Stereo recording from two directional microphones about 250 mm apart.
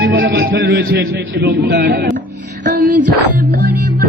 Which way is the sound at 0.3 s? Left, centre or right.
Right.